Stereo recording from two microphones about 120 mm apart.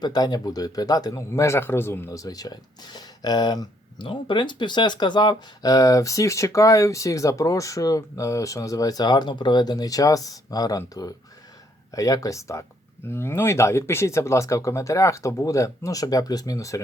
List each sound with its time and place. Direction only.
0.0 s speech: 35° left (ahead or behind)